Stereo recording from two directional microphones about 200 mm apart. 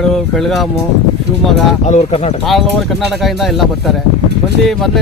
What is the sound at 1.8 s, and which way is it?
Speech, 35° left (ahead or behind).